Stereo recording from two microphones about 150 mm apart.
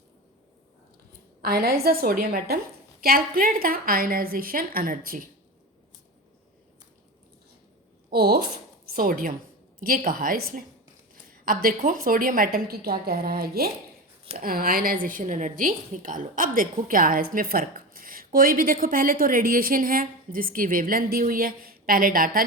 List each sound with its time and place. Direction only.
1.4 s a woman's voice: 90° right; by 5.3 s 70° right (ahead or behind)
8.1 s a woman's voice: 90° right
8.9 s a woman's voice: 75° right (ahead or behind); by 13.7 s 90° right
14.3 s a woman's voice: 75° right (ahead or behind)